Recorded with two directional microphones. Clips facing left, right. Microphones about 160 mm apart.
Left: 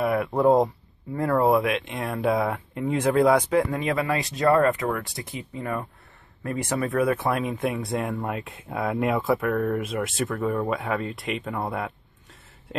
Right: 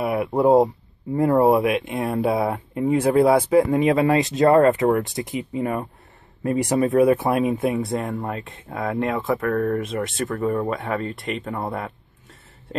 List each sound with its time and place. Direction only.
0.0 s speech: 15° right (ahead or behind)
3.7 s speech: 20° right (ahead or behind)
7.7 s speech: centre (ahead or behind)